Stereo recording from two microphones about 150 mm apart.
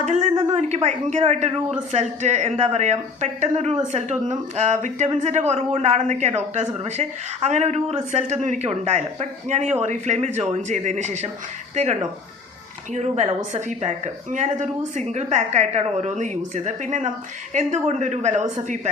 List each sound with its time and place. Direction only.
0.0 s a sound: 50° right (ahead or behind)
0.5 s a woman's voice: 50° right (ahead or behind)
12.9 s a woman's voice: 50° right (ahead or behind)